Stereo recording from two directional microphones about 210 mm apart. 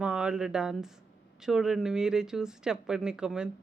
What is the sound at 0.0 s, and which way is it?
A woman's voice, 5° right (ahead or behind).